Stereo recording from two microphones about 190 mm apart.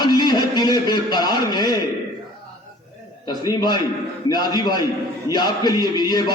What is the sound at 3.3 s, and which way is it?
Speech, 20° left (ahead or behind).